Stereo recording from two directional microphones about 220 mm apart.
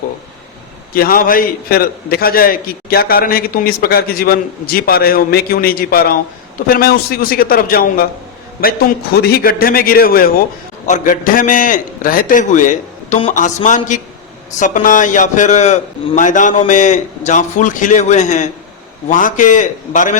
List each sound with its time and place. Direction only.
0.9 s a man's voice: 40° left (ahead or behind)